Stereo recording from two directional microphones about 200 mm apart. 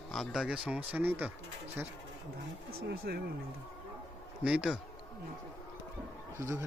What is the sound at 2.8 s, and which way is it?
Speech, 50° right (ahead or behind).